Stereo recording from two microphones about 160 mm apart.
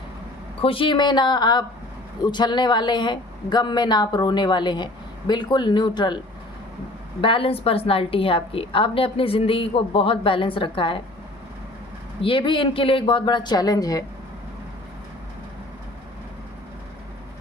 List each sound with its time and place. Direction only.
0.6 s a woman's voice: 35° left (ahead or behind)
7.2 s a woman's voice: 35° left (ahead or behind)
12.2 s a woman's voice: 30° left (ahead or behind)